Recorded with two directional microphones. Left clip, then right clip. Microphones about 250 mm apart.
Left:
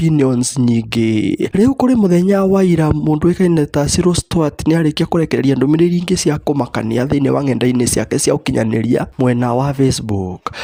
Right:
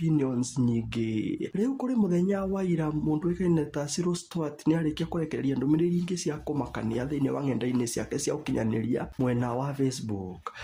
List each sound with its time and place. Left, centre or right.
0.0 s speech: left